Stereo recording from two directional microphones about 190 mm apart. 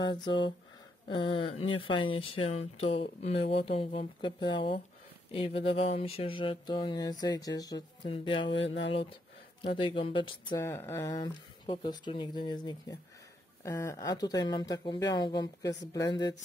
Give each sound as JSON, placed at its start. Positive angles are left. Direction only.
{"t": 0.0, "sound": "speech", "side_deg": 25}
{"t": 8.5, "sound": "speech", "side_deg": 75}
{"t": 9.6, "sound": "speech", "side_deg": 25}
{"t": 10.6, "sound": "speech", "side_deg": 15}